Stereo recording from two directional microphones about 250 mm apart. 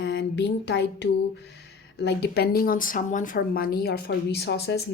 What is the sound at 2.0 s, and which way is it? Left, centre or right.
Speech, left.